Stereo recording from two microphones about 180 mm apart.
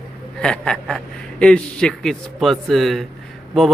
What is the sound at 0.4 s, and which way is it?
Speech, 5° left (ahead or behind).